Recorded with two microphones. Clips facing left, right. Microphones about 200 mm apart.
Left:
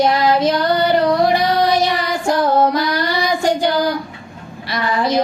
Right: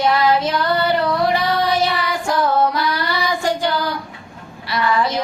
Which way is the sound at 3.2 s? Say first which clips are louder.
Left 3 dB; 15° left (ahead or behind).